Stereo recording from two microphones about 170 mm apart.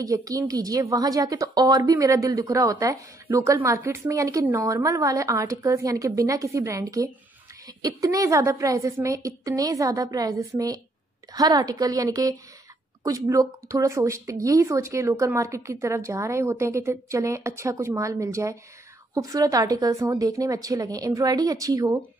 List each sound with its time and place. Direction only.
0.0 s a woman's voice: 20° right (ahead or behind)